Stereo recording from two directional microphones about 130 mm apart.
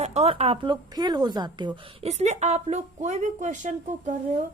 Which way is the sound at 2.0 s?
65° right (ahead or behind).